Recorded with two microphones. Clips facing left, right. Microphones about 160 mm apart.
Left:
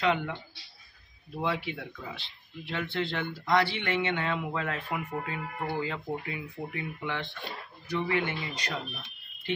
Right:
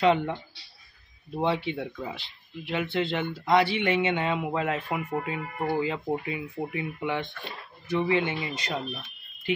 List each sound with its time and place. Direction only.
0.0 s speech: 25° right (ahead or behind)
1.3 s speech: 25° right (ahead or behind)